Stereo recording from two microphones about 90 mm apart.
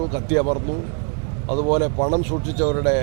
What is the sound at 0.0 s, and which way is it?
Speech, 20° right (ahead or behind).